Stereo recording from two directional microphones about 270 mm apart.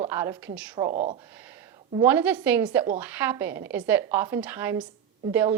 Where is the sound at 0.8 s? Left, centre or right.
Right.